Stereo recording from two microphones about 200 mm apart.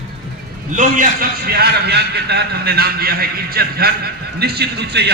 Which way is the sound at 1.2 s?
50° right (ahead or behind).